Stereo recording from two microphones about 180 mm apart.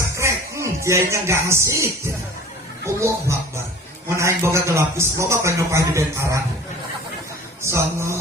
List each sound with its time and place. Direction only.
0.0 s music: 15° right (ahead or behind)
2.8 s a man's voice: 15° right (ahead or behind)
7.6 s a man's voice: 15° right (ahead or behind)